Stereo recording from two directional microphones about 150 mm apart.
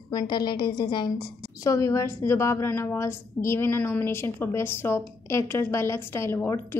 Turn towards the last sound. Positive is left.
turn(degrees=15)  # may be behind; listen again after turning